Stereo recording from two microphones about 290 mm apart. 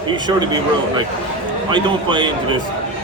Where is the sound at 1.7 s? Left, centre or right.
Centre.